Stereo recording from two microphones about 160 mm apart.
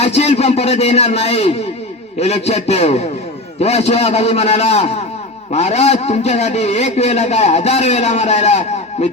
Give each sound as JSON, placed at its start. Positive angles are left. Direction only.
{"t": 0.0, "sound": "a man's voice", "side_deg": 40}